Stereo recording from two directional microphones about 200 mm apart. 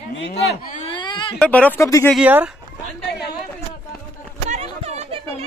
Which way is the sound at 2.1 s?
5° right (ahead or behind).